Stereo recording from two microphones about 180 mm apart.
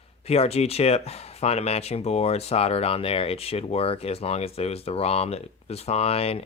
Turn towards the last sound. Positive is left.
turn(degrees=35)  # may be behind; listen again after turning